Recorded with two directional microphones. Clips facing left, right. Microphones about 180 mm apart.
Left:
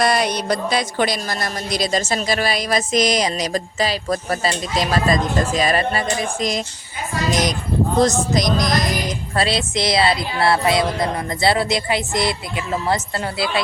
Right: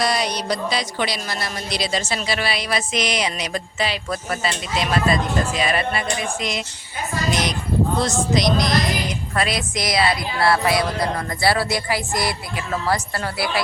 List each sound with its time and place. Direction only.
0.0 s speech: 55° left (ahead or behind)
9.3 s a woman's voice: 30° left (ahead or behind)